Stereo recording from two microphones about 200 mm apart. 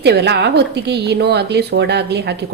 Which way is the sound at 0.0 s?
55° right (ahead or behind).